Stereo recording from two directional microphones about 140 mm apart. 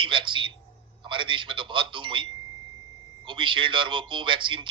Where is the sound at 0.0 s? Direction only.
35° right (ahead or behind).